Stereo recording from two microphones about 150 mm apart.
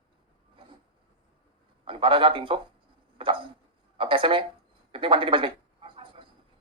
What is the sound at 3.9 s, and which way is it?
Speech, 35° right (ahead or behind).